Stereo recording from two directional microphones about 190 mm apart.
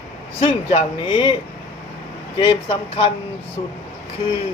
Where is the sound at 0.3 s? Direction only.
30° left (ahead or behind).